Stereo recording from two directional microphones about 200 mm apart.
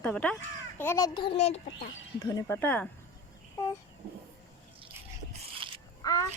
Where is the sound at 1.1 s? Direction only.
30° left (ahead or behind).